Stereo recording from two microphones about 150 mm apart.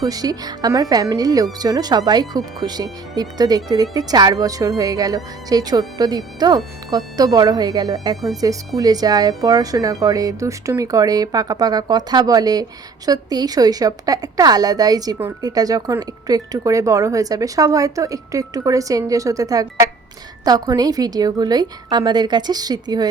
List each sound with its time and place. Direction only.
0.0 s a woman's voice: 25° right (ahead or behind)
8.1 s speech: centre (ahead or behind)
8.4 s a woman's voice: 25° right (ahead or behind)